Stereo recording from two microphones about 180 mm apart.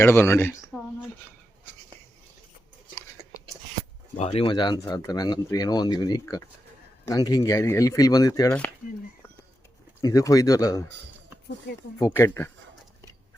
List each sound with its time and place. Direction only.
0.0 s speech: 15° left (ahead or behind)
4.2 s speech: 35° left (ahead or behind)
10.0 s speech: 20° left (ahead or behind)
11.9 s speech: 15° left (ahead or behind)